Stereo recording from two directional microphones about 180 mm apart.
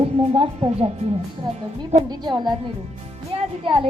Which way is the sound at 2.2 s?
25° right (ahead or behind).